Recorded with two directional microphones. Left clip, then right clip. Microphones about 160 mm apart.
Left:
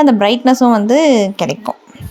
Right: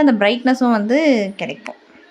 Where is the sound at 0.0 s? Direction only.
20° left (ahead or behind).